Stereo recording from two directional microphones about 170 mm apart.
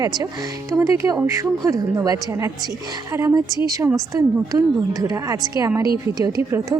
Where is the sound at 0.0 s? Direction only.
25° right (ahead or behind).